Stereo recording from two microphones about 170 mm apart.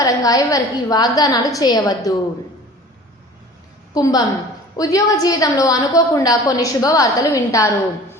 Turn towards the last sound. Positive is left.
turn(degrees=20)  # may be behind; listen again after turning